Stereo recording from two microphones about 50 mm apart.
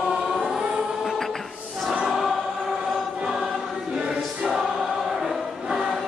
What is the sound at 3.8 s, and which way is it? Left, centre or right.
Choir, centre.